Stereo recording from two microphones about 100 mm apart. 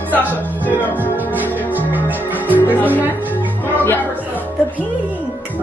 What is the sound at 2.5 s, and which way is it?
Speech, 15° left (ahead or behind).